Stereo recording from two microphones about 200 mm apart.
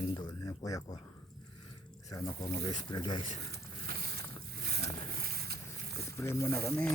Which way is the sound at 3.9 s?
50° right (ahead or behind).